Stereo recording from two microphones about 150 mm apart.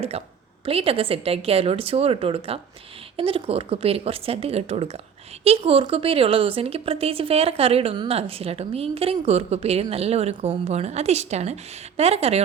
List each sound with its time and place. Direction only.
0.6 s a woman's voice: 40° right (ahead or behind)